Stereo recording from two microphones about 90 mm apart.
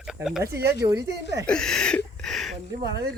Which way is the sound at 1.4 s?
10° left (ahead or behind).